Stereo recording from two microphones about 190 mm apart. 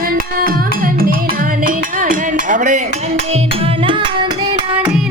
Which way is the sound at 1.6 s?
45° right (ahead or behind).